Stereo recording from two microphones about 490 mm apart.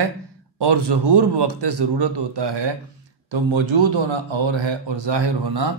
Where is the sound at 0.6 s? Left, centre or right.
Right.